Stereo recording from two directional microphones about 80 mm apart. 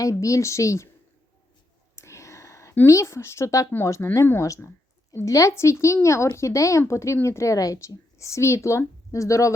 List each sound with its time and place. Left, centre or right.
0.0 s speech: left
2.0 s a sound: left
2.8 s speech: left